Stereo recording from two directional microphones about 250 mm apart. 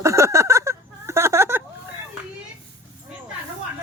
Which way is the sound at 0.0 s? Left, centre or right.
Centre.